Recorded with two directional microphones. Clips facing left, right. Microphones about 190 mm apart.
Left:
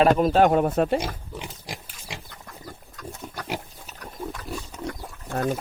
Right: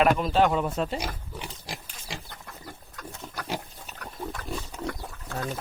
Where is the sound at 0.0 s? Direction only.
45° left (ahead or behind).